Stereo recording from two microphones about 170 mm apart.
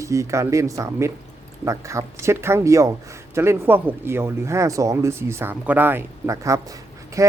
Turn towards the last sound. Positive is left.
turn(degrees=-20)  # may be behind; listen again after turning